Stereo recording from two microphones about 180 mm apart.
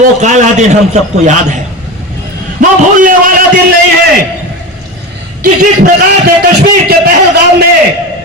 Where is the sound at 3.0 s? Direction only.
50° right (ahead or behind).